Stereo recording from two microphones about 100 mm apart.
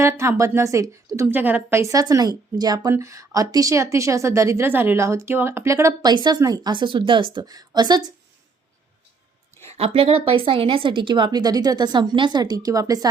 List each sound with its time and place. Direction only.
0.0 s a woman's voice: 30° right (ahead or behind)
1.3 s a woman's voice: 20° right (ahead or behind)
1.8 s speech: 35° right (ahead or behind)
6.1 s a woman's voice: 45° right (ahead or behind)
7.3 s a woman's voice: 40° right (ahead or behind)
9.6 s a woman's voice: 85° right; by 13.1 s 35° right (ahead or behind)